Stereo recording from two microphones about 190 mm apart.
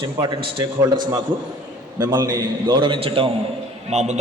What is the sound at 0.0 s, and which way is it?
Speech, 25° right (ahead or behind).